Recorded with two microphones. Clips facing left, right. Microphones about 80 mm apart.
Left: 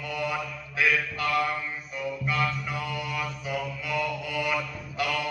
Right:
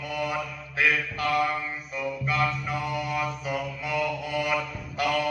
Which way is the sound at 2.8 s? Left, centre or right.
Right.